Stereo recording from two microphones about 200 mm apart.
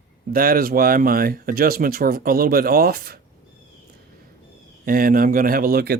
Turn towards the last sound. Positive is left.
turn(degrees=-50)  # may be behind; listen again after turning